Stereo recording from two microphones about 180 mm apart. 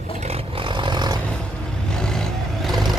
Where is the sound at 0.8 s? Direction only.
25° right (ahead or behind).